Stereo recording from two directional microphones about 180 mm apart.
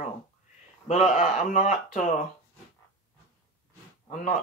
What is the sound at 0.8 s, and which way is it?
Speech, 40° left (ahead or behind).